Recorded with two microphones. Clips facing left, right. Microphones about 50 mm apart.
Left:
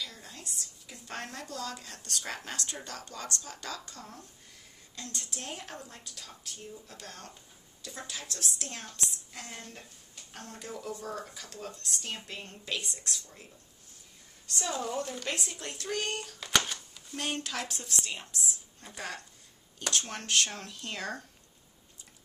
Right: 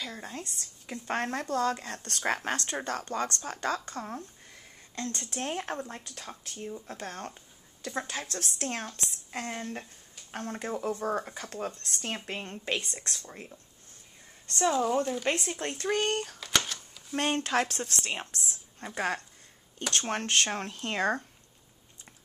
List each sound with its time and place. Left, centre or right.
0.0 s a woman's voice: right
14.7 s speech: centre
15.2 s speech: right
16.3 s a sound: centre
17.1 s a woman's voice: right